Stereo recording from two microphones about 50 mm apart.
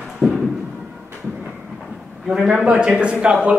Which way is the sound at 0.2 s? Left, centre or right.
Right.